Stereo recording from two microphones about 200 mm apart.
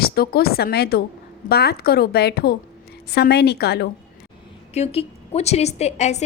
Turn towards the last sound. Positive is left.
turn(degrees=35)  # may be behind; listen again after turning